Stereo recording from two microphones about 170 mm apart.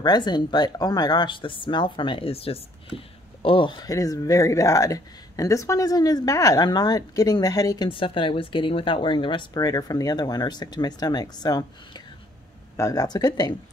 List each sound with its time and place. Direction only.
0.0 s speech: 25° left (ahead or behind)